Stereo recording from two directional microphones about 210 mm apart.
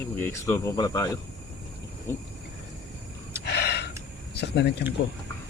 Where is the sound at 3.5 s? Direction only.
50° left (ahead or behind).